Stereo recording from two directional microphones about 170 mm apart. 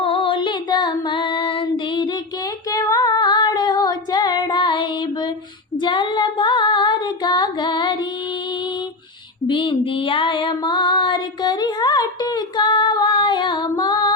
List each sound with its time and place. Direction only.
0.0 s child singing: 30° left (ahead or behind)
2.6 s female singing: 20° left (ahead or behind)
9.5 s female singing: 30° left (ahead or behind)